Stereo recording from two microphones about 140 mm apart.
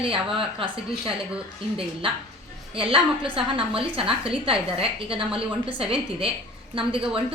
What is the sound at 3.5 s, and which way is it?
A woman's voice, 40° right (ahead or behind).